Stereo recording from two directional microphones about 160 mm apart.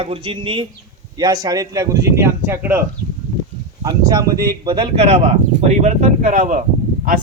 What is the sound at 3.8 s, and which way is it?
Speech, 25° right (ahead or behind).